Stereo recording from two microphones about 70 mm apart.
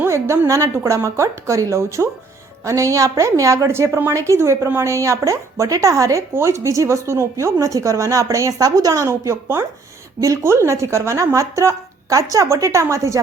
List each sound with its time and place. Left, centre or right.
0.1 s speech: right